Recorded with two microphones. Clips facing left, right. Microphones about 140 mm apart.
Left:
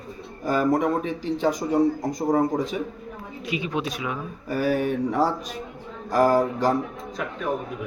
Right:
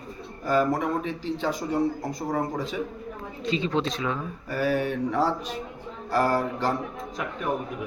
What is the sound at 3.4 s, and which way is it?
A man's voice, 15° left (ahead or behind).